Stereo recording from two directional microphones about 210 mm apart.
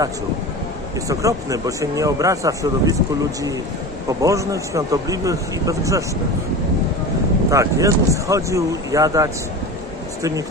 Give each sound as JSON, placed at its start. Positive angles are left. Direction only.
{"t": 1.0, "sound": "a man's voice", "side_deg": -15}
{"t": 4.2, "sound": "a man's voice", "side_deg": -15}
{"t": 7.5, "sound": "a man's voice", "side_deg": -15}